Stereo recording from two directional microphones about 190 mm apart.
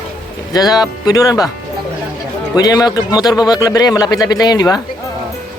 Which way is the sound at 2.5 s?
20° left (ahead or behind).